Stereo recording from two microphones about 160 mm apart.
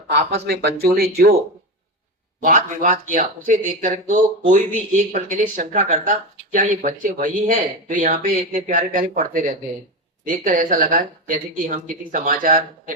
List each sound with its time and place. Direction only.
0.2 s speech: 40° right (ahead or behind)
0.4 s speech: 85° right
2.4 s speech: 55° right (ahead or behind)